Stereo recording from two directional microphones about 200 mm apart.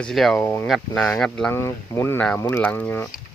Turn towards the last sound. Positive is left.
turn(degrees=10)  # may be behind; listen again after turning